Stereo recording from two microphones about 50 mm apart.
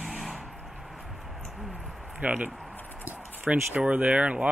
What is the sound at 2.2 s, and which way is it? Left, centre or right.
Speech, right.